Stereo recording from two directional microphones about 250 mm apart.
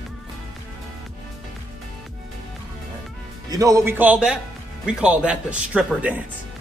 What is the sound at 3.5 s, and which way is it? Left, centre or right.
Speech, centre.